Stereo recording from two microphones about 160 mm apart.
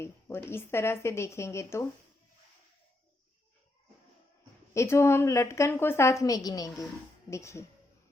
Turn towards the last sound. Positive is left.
turn(degrees=20)  # may be behind; listen again after turning